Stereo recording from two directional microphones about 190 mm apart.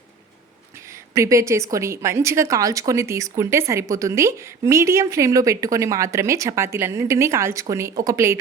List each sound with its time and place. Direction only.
1.1 s a woman's voice: 15° right (ahead or behind)